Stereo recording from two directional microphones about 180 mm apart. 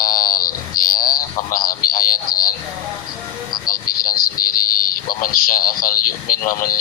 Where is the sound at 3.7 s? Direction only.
55° left (ahead or behind).